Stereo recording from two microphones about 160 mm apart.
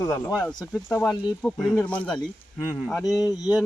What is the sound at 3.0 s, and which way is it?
Speech, 20° left (ahead or behind).